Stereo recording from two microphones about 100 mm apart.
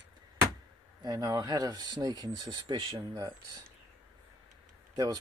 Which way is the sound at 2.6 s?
60° right (ahead or behind).